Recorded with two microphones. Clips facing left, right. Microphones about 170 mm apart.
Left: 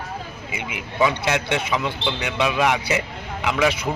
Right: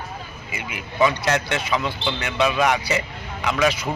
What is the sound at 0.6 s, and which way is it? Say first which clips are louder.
Speech: right 1 dB; 10° left (ahead or behind).